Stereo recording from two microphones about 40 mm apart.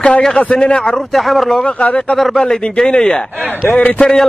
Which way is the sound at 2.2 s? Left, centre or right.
Centre.